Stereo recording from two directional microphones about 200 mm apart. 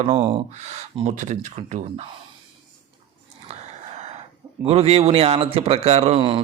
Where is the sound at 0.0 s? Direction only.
25° right (ahead or behind).